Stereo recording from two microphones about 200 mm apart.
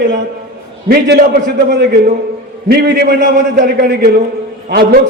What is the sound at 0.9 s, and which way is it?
A man's voice, 50° right (ahead or behind).